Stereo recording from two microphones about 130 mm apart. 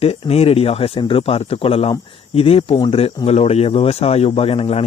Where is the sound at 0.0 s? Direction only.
50° left (ahead or behind).